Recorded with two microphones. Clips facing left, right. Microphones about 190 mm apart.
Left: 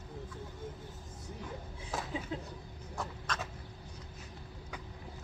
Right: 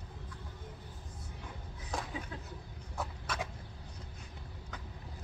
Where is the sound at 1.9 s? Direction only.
5° left (ahead or behind).